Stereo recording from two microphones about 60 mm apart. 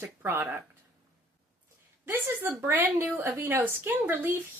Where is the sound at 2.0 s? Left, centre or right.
Right.